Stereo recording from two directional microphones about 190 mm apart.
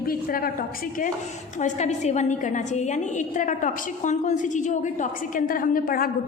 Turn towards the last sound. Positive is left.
turn(degrees=50)  # may be behind; listen again after turning